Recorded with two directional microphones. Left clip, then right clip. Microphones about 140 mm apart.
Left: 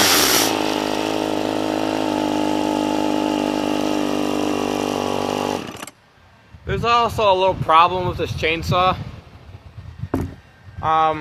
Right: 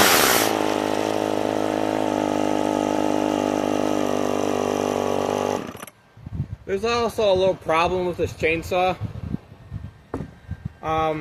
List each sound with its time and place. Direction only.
0.0 s a sound: 35° left (ahead or behind)
6.7 s speech: 5° right (ahead or behind)
10.8 s speech: 5° right (ahead or behind)